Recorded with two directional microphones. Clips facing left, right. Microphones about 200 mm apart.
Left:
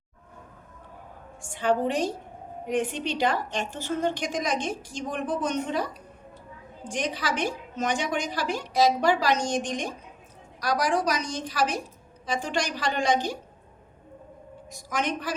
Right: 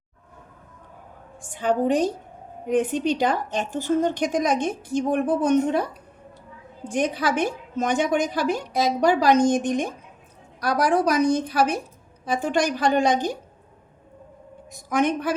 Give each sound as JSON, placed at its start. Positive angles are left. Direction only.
{"t": 1.6, "sound": "a woman's voice", "side_deg": -50}
{"t": 14.8, "sound": "a woman's voice", "side_deg": -55}